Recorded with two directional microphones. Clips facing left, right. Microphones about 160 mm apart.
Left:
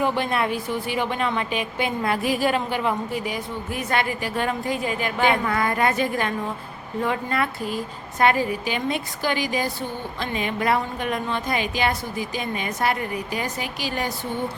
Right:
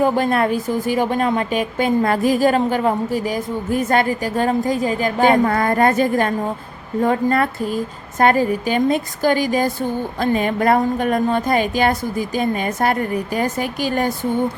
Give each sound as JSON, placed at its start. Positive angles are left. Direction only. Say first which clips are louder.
{"t": 0.0, "sound": "a woman's voice", "louder": "right 6 dB", "side_deg": -40}